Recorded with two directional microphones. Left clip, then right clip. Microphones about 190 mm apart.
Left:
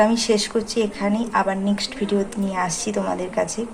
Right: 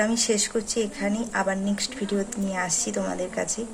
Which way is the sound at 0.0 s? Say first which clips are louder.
Left 6 dB; 15° right (ahead or behind).